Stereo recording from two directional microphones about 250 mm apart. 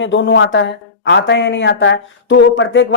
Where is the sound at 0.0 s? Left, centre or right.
Left.